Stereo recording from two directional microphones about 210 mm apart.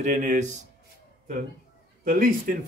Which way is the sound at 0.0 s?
35° right (ahead or behind).